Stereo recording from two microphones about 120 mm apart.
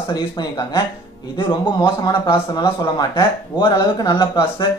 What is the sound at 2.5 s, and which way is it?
Speech, 35° left (ahead or behind).